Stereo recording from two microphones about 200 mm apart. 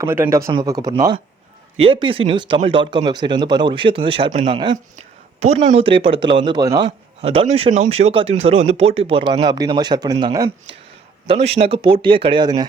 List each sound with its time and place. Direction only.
0.0 s speech: 10° right (ahead or behind)